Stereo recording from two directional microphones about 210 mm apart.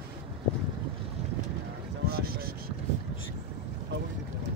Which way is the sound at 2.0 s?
45° right (ahead or behind).